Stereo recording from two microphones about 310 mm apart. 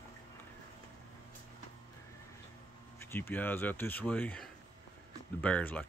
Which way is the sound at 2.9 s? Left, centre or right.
Centre.